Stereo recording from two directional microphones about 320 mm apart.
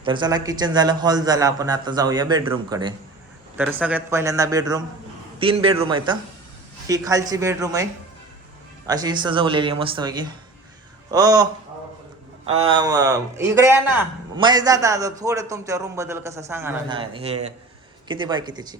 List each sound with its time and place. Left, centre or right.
0.0 s a man's voice: centre
8.9 s a man's voice: centre
12.5 s a man's voice: centre